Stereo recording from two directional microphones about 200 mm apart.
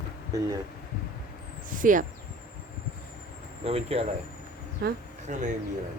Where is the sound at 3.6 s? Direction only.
30° right (ahead or behind).